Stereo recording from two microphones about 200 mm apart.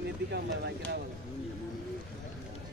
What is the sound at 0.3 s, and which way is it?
Speech, 55° right (ahead or behind).